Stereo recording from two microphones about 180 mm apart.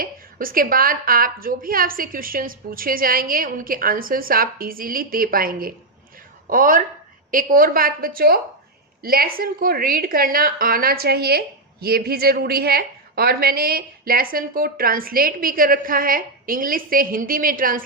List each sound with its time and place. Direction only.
0.0 s a woman's voice: 50° right (ahead or behind)